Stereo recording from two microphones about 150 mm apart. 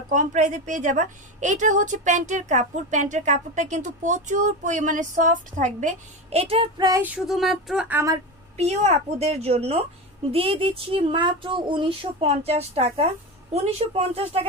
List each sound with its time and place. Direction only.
0.1 s a woman's voice: 55° right (ahead or behind)
6.4 s speech: 40° right (ahead or behind)
7.0 s speech: 5° right (ahead or behind)
8.5 s a woman's voice: 45° right (ahead or behind)